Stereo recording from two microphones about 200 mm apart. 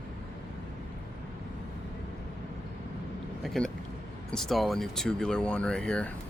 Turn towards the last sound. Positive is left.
turn(degrees=5)  # may be behind; listen again after turning